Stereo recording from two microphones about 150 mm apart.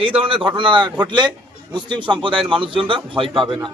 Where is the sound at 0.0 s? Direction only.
40° right (ahead or behind).